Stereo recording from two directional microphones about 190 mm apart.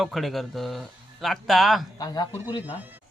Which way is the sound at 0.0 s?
Centre (ahead or behind).